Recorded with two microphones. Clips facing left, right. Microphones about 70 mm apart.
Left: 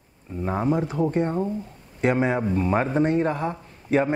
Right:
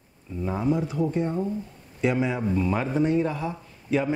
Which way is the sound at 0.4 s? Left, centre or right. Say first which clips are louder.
Left 2 dB; left.